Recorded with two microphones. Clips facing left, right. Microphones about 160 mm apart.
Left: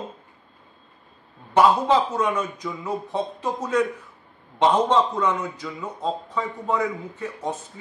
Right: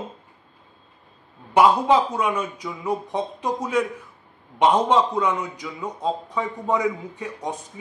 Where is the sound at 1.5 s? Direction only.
10° right (ahead or behind).